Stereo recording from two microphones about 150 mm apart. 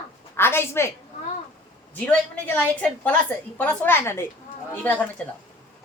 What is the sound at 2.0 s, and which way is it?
A woman's voice, 10° left (ahead or behind).